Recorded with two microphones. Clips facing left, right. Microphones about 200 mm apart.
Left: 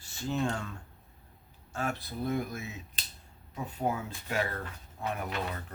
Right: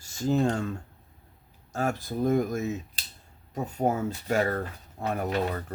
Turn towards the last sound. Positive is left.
turn(degrees=-40)  # may be behind; listen again after turning